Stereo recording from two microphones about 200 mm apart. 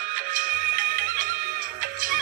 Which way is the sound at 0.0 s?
45° right (ahead or behind).